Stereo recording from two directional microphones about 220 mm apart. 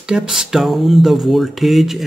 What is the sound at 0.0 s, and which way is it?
Speech, 5° right (ahead or behind).